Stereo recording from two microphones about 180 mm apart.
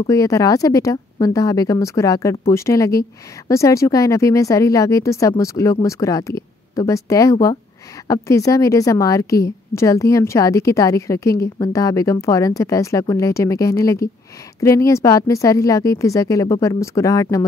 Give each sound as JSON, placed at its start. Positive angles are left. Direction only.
{"t": 0.0, "sound": "a woman's voice", "side_deg": 20}